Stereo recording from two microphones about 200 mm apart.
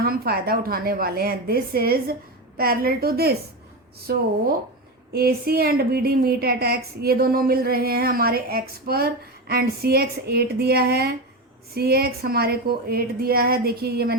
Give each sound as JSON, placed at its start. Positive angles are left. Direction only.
{"t": 0.0, "sound": "a woman's voice", "side_deg": -50}